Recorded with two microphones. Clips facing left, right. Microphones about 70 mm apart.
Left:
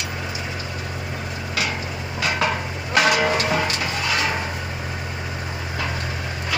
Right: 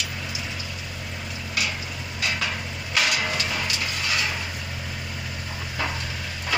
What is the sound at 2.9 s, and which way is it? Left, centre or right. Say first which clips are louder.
Music: left 7 dB; left.